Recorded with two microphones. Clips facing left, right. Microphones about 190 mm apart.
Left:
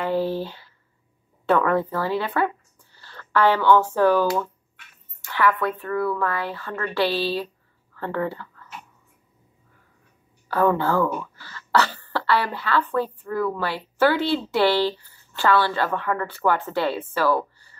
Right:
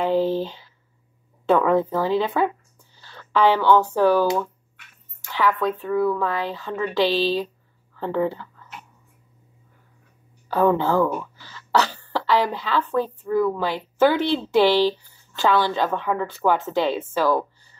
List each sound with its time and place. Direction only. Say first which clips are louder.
0.0 s speech: right 3 dB; 15° right (ahead or behind)
1.5 s speech: right 2 dB; 15° right (ahead or behind)
10.5 s speech: right 2 dB; 15° right (ahead or behind)